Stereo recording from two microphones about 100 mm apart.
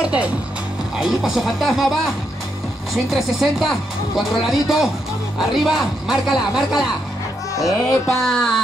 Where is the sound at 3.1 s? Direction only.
5° right (ahead or behind).